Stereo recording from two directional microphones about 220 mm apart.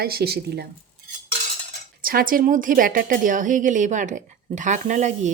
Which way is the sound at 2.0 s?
40° right (ahead or behind).